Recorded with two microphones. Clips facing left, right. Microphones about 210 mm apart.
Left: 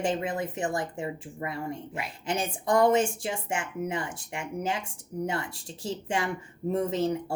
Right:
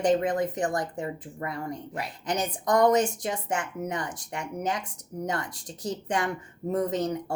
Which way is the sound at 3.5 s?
25° left (ahead or behind).